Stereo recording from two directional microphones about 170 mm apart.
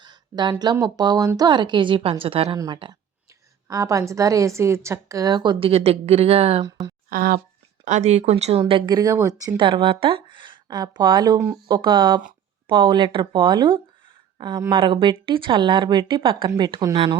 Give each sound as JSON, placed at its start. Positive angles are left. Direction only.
{"t": 0.0, "sound": "a sound", "side_deg": -25}
{"t": 0.6, "sound": "a woman's voice", "side_deg": -25}
{"t": 7.1, "sound": "speech", "side_deg": -60}
{"t": 7.9, "sound": "speech", "side_deg": -45}
{"t": 9.0, "sound": "a woman's voice", "side_deg": -20}
{"t": 9.6, "sound": "a woman's voice", "side_deg": -30}